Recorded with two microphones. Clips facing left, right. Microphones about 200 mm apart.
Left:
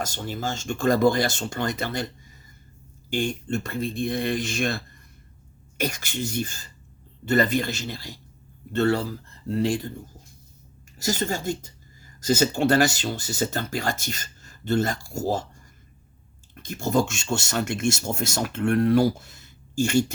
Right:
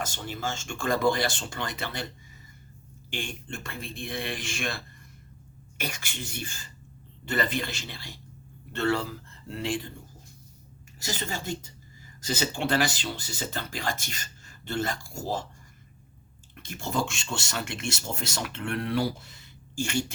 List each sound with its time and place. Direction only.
0.0 s speech: 40° left (ahead or behind)
3.1 s speech: 40° left (ahead or behind)
11.0 s speech: 40° left (ahead or behind)
16.6 s speech: 40° left (ahead or behind)